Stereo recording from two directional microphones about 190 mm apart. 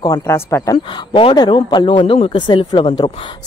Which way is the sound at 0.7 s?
30° left (ahead or behind).